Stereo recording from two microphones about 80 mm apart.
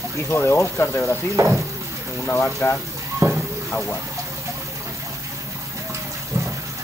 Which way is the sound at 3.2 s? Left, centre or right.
Right.